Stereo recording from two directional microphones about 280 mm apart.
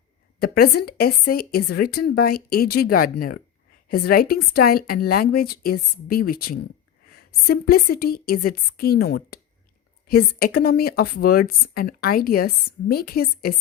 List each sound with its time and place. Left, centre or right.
0.3 s a woman's voice: left